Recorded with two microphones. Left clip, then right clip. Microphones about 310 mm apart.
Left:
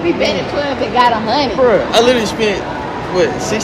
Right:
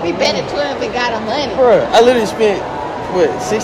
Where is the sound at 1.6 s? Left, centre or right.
Right.